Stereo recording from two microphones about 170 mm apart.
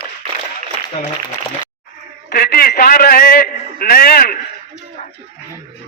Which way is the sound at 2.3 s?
65° left (ahead or behind).